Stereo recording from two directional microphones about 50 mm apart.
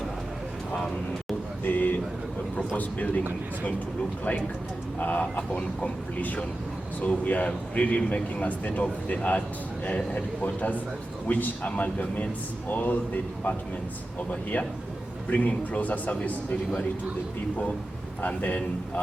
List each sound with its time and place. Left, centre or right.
1.6 s a sound: left
2.6 s speech: left
4.9 s speech: left
14.2 s speech: left
18.2 s speech: left